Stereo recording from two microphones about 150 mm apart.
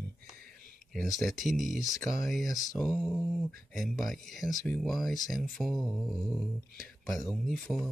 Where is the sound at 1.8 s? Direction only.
20° left (ahead or behind).